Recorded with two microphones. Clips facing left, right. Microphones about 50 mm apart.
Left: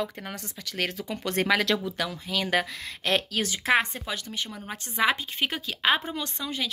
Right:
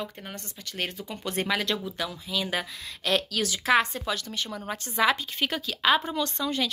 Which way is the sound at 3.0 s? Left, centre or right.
Left.